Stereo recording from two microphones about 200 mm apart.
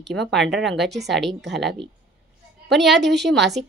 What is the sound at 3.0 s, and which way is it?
Speech, 60° right (ahead or behind).